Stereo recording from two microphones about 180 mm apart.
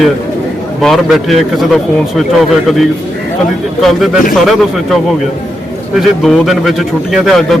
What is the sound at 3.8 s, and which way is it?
Speech, centre (ahead or behind).